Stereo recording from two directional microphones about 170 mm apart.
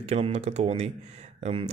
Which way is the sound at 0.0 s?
40° right (ahead or behind).